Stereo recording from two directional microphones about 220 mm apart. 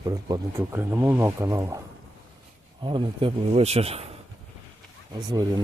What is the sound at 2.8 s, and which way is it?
Speech, 20° right (ahead or behind).